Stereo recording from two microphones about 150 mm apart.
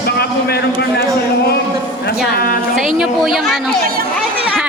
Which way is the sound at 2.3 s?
75° left (ahead or behind).